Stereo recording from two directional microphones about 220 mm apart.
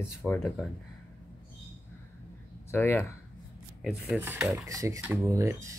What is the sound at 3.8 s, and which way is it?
Speech, 5° right (ahead or behind).